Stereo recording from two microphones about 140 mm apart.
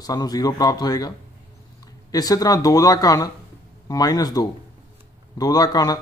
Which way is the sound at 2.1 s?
25° left (ahead or behind).